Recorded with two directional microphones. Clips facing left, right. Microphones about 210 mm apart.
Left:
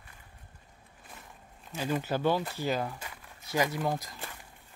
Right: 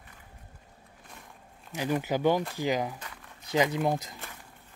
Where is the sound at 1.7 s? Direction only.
15° right (ahead or behind).